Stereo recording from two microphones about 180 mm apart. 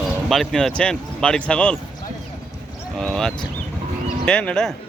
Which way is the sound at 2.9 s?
5° left (ahead or behind).